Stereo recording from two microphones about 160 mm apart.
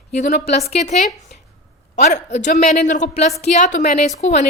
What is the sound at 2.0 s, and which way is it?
A woman's voice, 45° left (ahead or behind).